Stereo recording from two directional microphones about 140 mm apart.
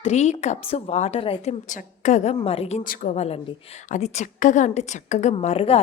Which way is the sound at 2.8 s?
75° left (ahead or behind).